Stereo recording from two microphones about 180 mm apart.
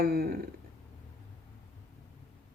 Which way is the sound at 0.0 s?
60° right (ahead or behind).